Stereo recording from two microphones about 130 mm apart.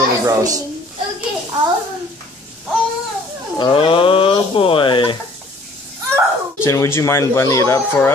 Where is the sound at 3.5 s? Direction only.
40° left (ahead or behind).